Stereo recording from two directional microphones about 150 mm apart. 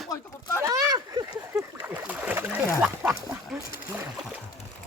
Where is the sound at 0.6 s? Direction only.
20° right (ahead or behind).